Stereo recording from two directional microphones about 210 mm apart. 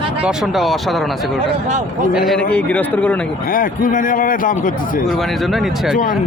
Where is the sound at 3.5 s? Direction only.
40° left (ahead or behind).